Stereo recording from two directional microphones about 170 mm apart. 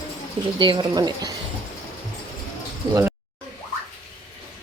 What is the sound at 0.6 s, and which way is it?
Speech, 25° right (ahead or behind).